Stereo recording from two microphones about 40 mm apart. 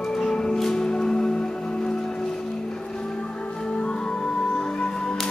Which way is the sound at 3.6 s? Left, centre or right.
Left.